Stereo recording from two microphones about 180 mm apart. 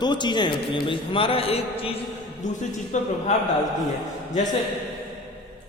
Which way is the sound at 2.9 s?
40° left (ahead or behind).